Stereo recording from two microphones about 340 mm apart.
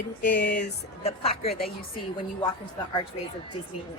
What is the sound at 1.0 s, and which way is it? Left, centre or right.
Speech, centre.